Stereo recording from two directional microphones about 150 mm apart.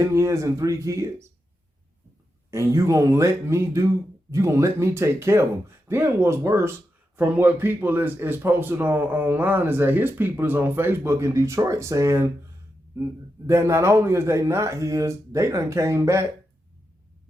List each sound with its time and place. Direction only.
0.0 s speech: 20° right (ahead or behind)
2.5 s a man's voice: 20° right (ahead or behind)
13.5 s speech: 20° right (ahead or behind)